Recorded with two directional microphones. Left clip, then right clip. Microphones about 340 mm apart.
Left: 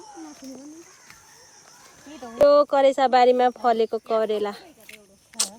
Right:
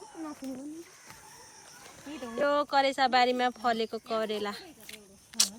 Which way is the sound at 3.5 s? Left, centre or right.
Left.